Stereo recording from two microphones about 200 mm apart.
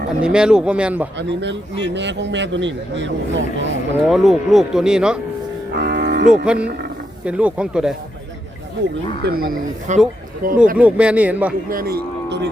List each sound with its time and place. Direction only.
0.2 s speech: 5° right (ahead or behind)
1.4 s speech: 60° right (ahead or behind)
4.0 s speech: centre (ahead or behind)
5.7 s cattle: 55° right (ahead or behind)
6.4 s speech: 5° right (ahead or behind)
9.2 s speech: 50° right (ahead or behind)
10.8 s speech: 5° right (ahead or behind)
11.7 s speech: 50° right (ahead or behind)